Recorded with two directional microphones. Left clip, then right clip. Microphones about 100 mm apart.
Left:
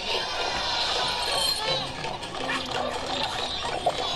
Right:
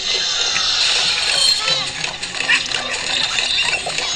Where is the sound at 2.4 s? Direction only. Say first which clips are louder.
Right 12 dB; 10° right (ahead or behind).